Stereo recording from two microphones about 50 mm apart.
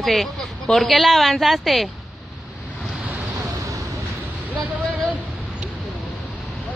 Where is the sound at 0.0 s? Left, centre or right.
Centre.